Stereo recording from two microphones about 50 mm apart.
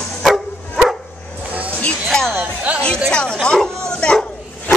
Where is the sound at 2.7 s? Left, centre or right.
Right.